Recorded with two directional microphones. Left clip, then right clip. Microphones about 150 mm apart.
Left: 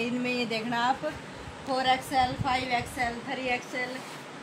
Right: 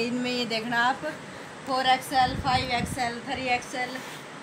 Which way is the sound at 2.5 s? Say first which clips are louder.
Right 2 dB; 10° right (ahead or behind).